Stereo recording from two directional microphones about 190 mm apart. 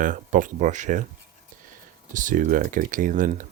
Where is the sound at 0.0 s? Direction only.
45° right (ahead or behind).